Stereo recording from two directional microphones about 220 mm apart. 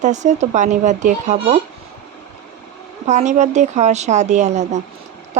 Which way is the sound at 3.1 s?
35° right (ahead or behind).